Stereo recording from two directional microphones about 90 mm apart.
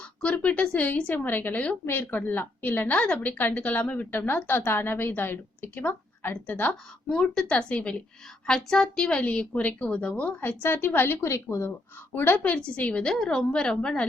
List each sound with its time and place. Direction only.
0.2 s a woman's voice: 15° left (ahead or behind)